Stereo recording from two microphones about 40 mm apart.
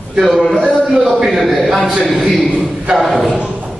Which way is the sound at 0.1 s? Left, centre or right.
Centre.